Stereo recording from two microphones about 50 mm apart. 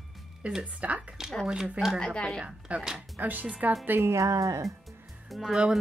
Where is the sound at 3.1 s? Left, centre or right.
Right.